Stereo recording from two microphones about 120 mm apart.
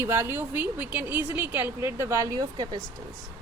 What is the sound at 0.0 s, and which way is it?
A woman's voice, 20° right (ahead or behind).